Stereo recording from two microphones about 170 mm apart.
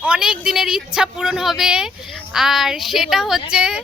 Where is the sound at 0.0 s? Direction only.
5° right (ahead or behind).